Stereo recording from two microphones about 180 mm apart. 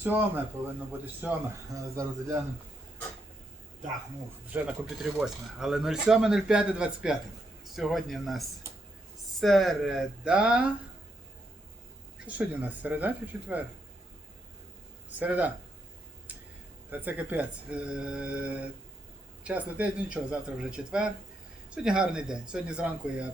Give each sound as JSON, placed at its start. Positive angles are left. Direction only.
{"t": 0.0, "sound": "speech", "side_deg": -10}
{"t": 4.5, "sound": "speech", "side_deg": -5}
{"t": 12.2, "sound": "speech", "side_deg": -10}
{"t": 15.2, "sound": "speech", "side_deg": -10}
{"t": 16.9, "sound": "speech", "side_deg": -10}